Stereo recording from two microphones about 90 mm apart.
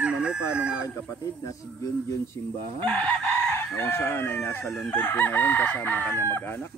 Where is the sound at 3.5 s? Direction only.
25° left (ahead or behind).